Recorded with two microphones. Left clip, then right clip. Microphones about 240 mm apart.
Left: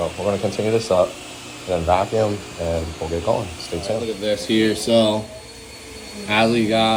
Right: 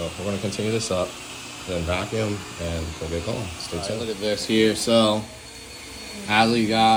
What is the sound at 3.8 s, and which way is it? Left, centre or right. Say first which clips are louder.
Speech: left 4 dB; centre.